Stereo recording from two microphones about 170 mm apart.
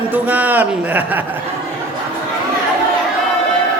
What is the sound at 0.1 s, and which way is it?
A man's voice, 10° right (ahead or behind).